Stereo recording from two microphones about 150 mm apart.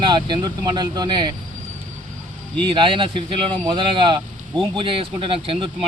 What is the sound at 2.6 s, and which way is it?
Speech, 35° right (ahead or behind).